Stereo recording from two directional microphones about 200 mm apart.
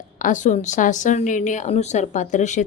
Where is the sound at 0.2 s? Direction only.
40° left (ahead or behind).